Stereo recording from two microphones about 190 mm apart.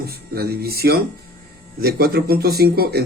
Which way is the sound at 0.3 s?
55° right (ahead or behind).